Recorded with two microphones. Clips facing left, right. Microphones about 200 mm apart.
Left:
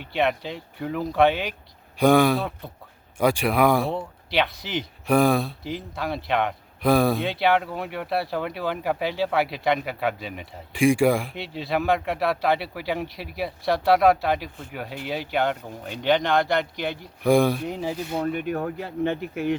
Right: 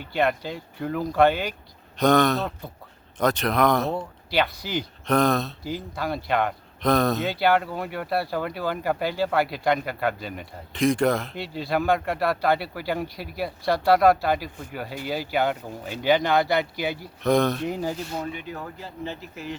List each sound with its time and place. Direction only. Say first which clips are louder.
0.0 s speech: even; centre (ahead or behind)
17.2 s speech: left 2 dB; 10° left (ahead or behind)
18.3 s speech: left 8 dB; 55° left (ahead or behind)